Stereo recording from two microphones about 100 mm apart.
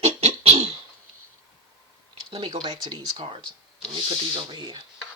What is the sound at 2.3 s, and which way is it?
Speech, 55° right (ahead or behind).